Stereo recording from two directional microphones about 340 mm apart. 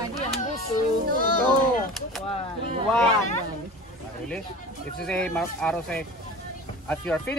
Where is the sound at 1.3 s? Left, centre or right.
Left.